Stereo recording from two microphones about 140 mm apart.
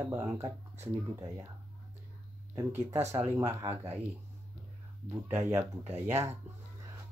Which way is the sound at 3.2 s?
15° right (ahead or behind).